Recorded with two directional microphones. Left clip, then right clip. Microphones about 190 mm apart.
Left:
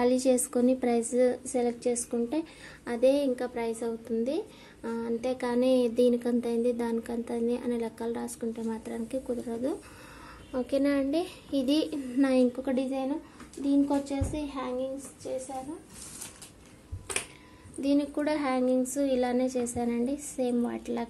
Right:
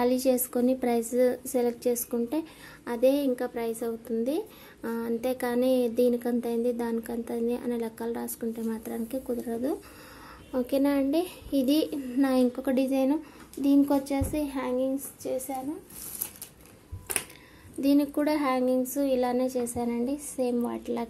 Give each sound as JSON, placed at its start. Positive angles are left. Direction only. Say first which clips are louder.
{"t": 0.0, "sound": "speech", "louder": "even", "side_deg": -5}
{"t": 12.7, "sound": "speech", "louder": "right 5 dB", "side_deg": -30}
{"t": 17.7, "sound": "speech", "louder": "right 3 dB", "side_deg": -20}